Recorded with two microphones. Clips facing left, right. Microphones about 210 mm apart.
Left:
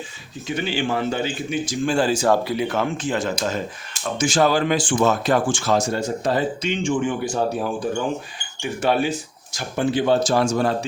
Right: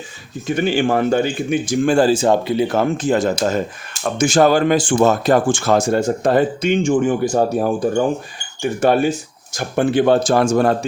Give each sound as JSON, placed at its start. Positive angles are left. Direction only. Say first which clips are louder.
{"t": 0.4, "sound": "speech", "louder": "right 7 dB", "side_deg": -50}
{"t": 2.0, "sound": "speech", "louder": "right 4 dB", "side_deg": -25}
{"t": 2.6, "sound": "speech", "louder": "right 6 dB", "side_deg": -40}